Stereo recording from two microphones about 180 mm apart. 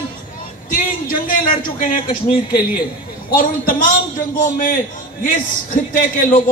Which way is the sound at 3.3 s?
50° left (ahead or behind).